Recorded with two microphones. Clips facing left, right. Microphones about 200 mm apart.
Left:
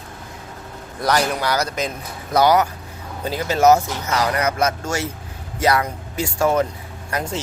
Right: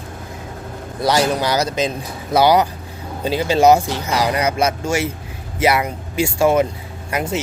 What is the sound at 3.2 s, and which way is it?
Speech, 25° right (ahead or behind).